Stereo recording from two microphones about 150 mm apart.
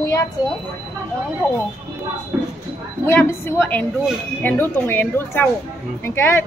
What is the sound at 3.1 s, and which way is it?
A woman's voice, 15° left (ahead or behind).